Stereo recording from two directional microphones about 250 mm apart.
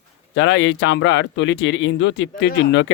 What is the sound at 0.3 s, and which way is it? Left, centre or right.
Speech, left.